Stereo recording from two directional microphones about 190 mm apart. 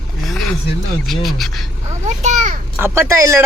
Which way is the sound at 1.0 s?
Centre (ahead or behind).